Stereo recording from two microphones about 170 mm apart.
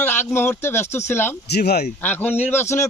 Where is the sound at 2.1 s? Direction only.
10° left (ahead or behind).